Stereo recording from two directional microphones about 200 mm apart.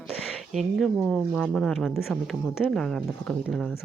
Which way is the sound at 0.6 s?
Centre (ahead or behind).